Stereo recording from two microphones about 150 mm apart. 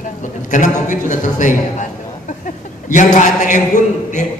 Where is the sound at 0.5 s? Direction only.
55° left (ahead or behind).